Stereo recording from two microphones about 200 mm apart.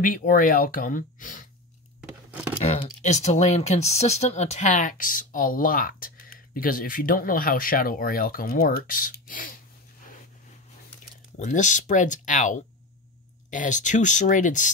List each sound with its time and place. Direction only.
0.0 s speech: 45° left (ahead or behind)
2.0 s a sound: 5° right (ahead or behind)
2.6 s speech: 30° left (ahead or behind)
11.3 s speech: 40° left (ahead or behind)